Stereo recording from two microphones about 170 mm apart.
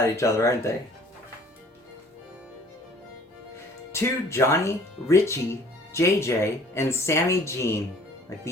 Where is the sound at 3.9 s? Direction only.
15° left (ahead or behind).